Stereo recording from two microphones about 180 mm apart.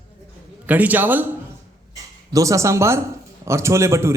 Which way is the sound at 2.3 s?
15° right (ahead or behind).